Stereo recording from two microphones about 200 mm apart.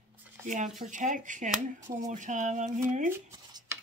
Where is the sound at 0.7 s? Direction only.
40° right (ahead or behind).